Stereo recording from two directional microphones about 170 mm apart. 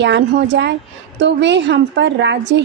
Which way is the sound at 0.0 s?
90° right.